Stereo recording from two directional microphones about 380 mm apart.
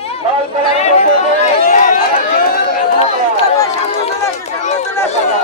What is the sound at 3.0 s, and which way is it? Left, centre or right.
Run, centre.